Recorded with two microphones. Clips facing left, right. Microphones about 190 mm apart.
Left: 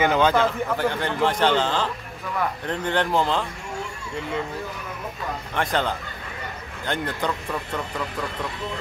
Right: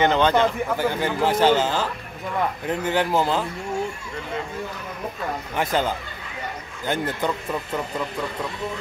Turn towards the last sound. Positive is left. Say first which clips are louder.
# right 2 dB
turn(degrees=-5)  # may be behind; listen again after turning